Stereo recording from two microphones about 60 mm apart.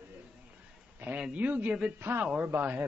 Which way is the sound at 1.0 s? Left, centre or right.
Right.